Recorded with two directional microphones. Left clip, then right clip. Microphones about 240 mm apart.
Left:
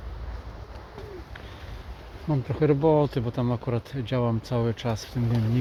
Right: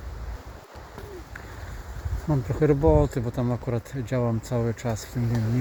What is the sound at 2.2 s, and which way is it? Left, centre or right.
Speech, centre.